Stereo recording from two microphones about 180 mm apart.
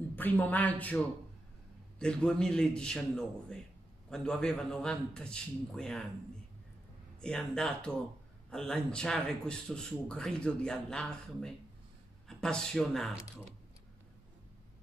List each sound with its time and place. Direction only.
0.1 s speech: 10° left (ahead or behind)
7.2 s speech: 5° left (ahead or behind)